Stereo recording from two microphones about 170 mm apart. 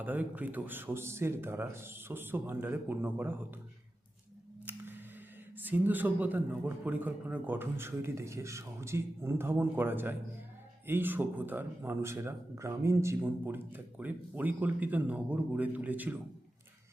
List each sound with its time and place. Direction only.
0.0 s speech: 10° right (ahead or behind)
4.6 s a sound: 10° right (ahead or behind)
5.6 s speech: 10° right (ahead or behind)